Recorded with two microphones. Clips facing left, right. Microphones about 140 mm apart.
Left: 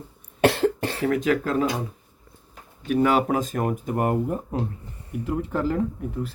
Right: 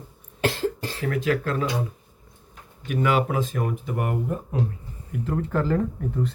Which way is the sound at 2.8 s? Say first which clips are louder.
Left 3 dB; 35° left (ahead or behind).